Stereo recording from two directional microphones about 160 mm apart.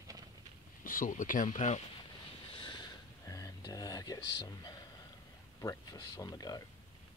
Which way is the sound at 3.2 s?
20° left (ahead or behind).